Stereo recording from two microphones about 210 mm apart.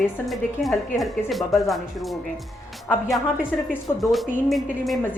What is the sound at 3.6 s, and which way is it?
A woman's voice, centre (ahead or behind).